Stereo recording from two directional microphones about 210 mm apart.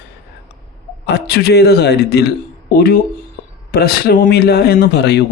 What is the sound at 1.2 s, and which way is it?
Speech, 50° left (ahead or behind).